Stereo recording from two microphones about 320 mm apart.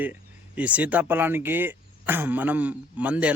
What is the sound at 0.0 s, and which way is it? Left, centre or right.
Speech, centre.